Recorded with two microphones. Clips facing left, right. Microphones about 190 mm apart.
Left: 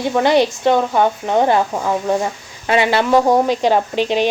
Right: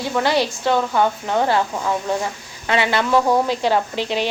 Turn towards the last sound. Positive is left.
turn(degrees=15)  # may be behind; listen again after turning